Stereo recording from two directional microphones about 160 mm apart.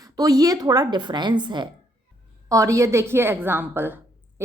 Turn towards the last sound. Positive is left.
turn(degrees=-15)  # may be behind; listen again after turning